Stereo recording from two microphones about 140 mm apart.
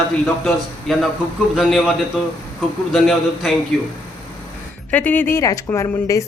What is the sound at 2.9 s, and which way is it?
Speech, centre (ahead or behind).